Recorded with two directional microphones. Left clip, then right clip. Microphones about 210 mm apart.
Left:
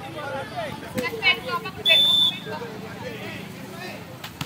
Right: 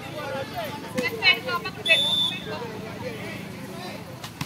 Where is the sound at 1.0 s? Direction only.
55° right (ahead or behind).